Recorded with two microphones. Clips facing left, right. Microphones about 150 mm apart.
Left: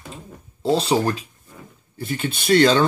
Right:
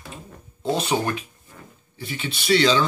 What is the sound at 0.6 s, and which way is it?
Speech, 30° left (ahead or behind).